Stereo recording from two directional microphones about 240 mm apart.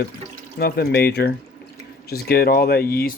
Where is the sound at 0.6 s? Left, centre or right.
Left.